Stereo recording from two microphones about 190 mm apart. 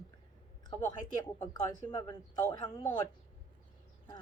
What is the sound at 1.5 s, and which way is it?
Speech, 20° left (ahead or behind).